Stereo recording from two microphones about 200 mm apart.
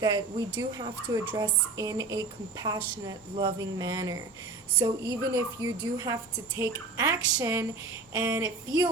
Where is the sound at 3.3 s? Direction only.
20° right (ahead or behind).